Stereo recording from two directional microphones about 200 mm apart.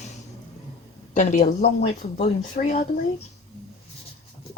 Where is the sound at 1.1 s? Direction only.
35° left (ahead or behind).